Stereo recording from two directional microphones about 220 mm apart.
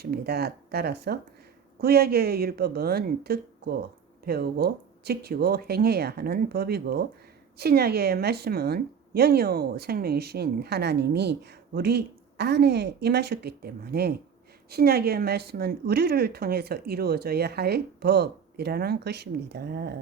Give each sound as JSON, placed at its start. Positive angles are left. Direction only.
{"t": 0.0, "sound": "a woman's voice", "side_deg": -45}